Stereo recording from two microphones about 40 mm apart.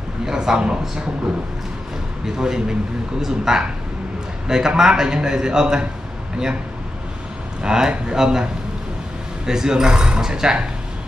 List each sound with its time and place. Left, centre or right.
0.2 s a man's voice: centre
2.2 s a man's voice: centre
7.6 s a man's voice: centre
9.5 s a man's voice: centre